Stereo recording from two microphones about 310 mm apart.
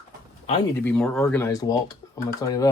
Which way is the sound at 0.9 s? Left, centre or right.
Centre.